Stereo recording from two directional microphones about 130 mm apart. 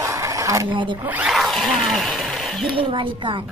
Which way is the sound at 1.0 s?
10° right (ahead or behind).